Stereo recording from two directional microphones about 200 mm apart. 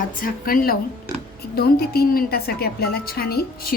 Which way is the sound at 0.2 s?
45° left (ahead or behind).